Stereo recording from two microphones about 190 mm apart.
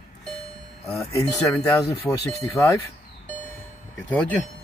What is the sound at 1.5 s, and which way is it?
Speech, 10° left (ahead or behind).